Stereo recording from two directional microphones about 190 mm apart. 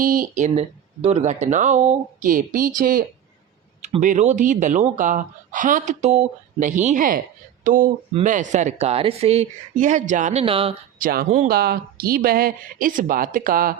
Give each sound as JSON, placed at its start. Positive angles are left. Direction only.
{"t": 0.0, "sound": "speech", "side_deg": -45}
{"t": 11.0, "sound": "speech", "side_deg": -50}